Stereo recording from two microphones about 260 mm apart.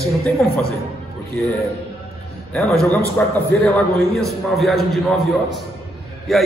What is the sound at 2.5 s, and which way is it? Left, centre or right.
Speech, centre.